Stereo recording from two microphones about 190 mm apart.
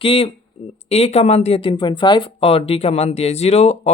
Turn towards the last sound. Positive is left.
turn(degrees=35)  # may be behind; listen again after turning